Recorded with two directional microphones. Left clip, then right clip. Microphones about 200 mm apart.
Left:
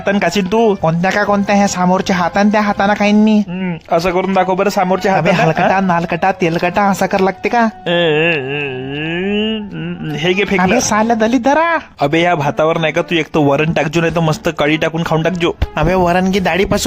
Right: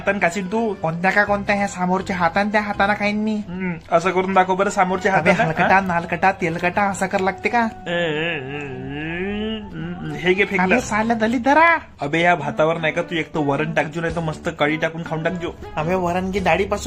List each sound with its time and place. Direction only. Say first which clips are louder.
0.0 s speech: left 5 dB; 45° left (ahead or behind)